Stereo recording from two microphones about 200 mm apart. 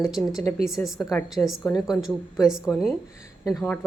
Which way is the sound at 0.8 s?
Centre (ahead or behind).